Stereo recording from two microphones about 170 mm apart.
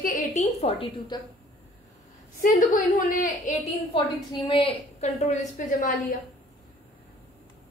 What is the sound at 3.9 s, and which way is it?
A woman's voice, 30° left (ahead or behind).